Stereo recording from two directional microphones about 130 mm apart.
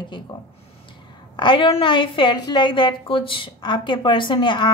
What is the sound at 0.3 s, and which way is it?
A woman's voice, 40° left (ahead or behind).